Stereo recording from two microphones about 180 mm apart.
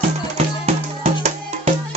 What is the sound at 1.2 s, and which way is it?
Music, 35° right (ahead or behind).